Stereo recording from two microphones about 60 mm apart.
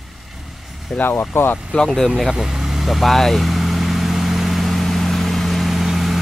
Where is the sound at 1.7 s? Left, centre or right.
Centre.